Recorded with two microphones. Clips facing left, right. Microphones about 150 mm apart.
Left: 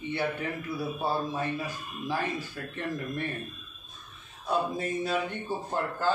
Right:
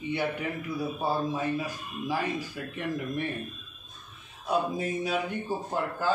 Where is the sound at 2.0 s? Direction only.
10° right (ahead or behind).